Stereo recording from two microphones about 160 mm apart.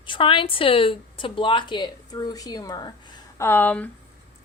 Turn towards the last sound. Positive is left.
turn(degrees=10)  # may be behind; listen again after turning